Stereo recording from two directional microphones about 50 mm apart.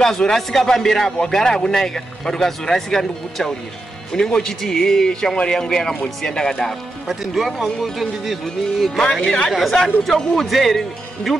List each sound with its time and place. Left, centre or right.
0.0 s speech: centre
7.1 s speech: centre
9.0 s speech: centre
9.5 s speech: centre
10.4 s speech: centre